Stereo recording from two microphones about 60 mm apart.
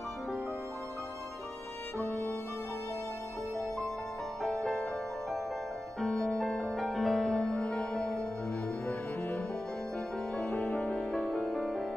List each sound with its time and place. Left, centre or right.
2.0 s music: left
4.4 s music: centre
5.9 s music: centre
10.3 s music: centre